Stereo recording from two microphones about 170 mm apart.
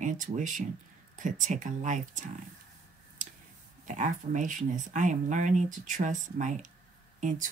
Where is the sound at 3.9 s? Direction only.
45° right (ahead or behind).